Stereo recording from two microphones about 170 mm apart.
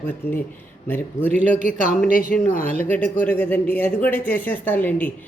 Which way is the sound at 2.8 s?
10° left (ahead or behind).